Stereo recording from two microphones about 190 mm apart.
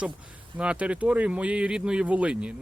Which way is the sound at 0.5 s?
5° right (ahead or behind).